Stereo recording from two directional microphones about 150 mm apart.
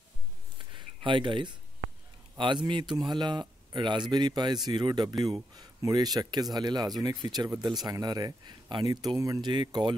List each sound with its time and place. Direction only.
0.7 s a man's voice: 35° right (ahead or behind)